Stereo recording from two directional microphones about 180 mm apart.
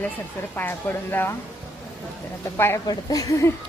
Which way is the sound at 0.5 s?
10° left (ahead or behind).